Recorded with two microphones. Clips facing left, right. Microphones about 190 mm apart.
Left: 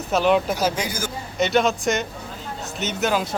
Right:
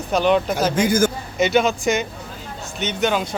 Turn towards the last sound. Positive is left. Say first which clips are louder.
# right 2 dB
turn(degrees=5)  # may be behind; listen again after turning